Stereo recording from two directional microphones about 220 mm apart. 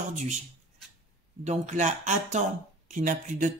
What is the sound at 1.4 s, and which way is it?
Speech, 30° right (ahead or behind).